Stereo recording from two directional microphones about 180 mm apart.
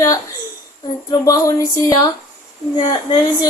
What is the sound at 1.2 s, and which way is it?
A woman's voice, 20° left (ahead or behind).